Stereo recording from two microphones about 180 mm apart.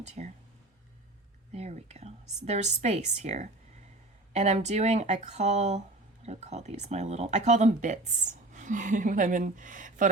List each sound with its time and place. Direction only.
0.0 s speech: 40° right (ahead or behind)
1.5 s a woman's voice: 35° right (ahead or behind)